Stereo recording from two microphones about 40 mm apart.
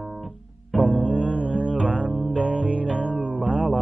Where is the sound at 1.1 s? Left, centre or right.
Right.